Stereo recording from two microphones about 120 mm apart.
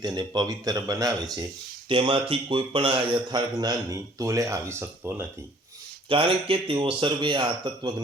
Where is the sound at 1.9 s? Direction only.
45° right (ahead or behind); by 5.2 s 20° right (ahead or behind).